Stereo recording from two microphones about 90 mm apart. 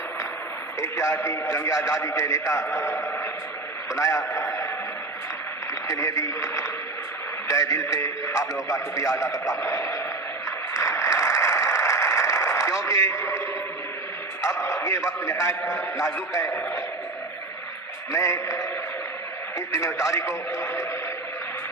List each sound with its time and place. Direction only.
0.8 s speech: 35° left (ahead or behind)
3.9 s speech: 40° left (ahead or behind)
4.4 s a sound: 30° left (ahead or behind)
5.9 s speech: 35° left (ahead or behind)
10.9 s a sound: 35° left (ahead or behind)
12.9 s speech: 35° left (ahead or behind)
14.4 s speech: 35° left (ahead or behind)
18.1 s speech: 35° left (ahead or behind)